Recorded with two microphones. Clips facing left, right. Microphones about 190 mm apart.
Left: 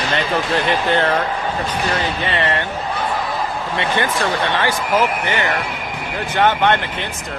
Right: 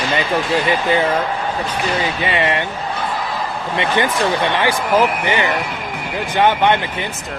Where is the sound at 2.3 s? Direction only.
15° right (ahead or behind).